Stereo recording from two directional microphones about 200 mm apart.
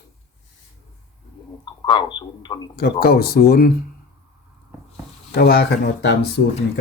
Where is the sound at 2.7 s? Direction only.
50° left (ahead or behind).